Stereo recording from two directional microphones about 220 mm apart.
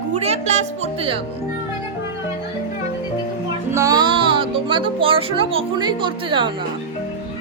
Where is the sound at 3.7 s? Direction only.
15° right (ahead or behind).